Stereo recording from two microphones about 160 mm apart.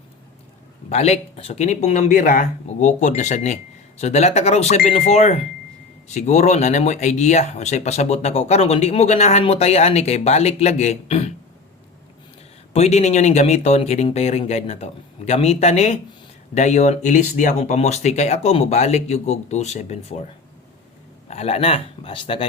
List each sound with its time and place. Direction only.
0.9 s speech: 40° left (ahead or behind)
12.7 s speech: 45° left (ahead or behind)
21.2 s speech: 40° left (ahead or behind)